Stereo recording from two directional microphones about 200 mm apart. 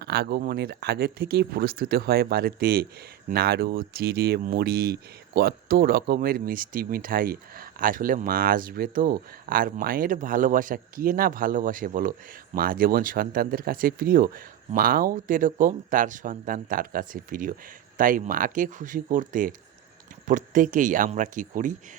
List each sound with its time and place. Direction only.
0.0 s speech: 55° right (ahead or behind)